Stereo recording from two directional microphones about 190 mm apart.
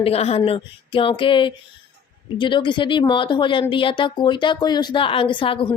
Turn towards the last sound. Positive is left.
turn(degrees=30)  # may be behind; listen again after turning